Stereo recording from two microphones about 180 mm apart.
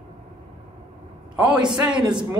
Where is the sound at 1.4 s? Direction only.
25° right (ahead or behind).